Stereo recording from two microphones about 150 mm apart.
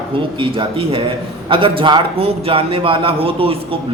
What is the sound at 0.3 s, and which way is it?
A man's voice, 35° right (ahead or behind).